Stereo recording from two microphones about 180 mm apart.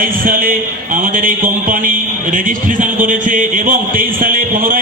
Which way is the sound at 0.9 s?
50° right (ahead or behind).